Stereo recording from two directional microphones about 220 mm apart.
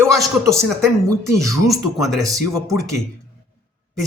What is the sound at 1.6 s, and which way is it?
Speech, centre (ahead or behind).